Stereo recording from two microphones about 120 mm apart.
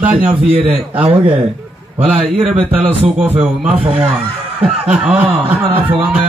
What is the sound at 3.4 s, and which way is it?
Speech, 10° right (ahead or behind).